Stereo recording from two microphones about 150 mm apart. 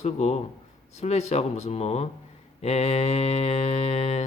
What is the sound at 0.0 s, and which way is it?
Mantra, 45° left (ahead or behind).